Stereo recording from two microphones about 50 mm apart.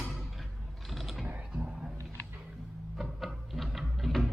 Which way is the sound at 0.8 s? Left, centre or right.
Centre.